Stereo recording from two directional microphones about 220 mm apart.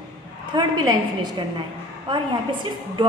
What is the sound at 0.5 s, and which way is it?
A woman's voice, 20° right (ahead or behind).